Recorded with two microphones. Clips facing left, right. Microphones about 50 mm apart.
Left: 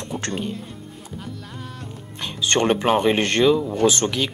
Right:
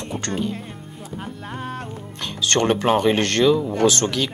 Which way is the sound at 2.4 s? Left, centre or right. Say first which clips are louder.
Even; centre.